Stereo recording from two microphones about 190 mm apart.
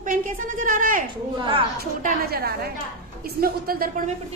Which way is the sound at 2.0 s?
55° right (ahead or behind).